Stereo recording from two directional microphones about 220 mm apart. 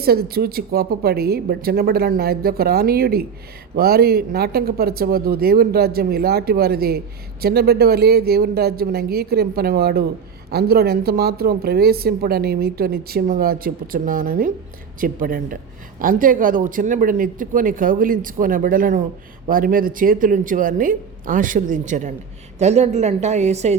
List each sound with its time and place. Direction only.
0.0 s a woman's voice: 45° right (ahead or behind)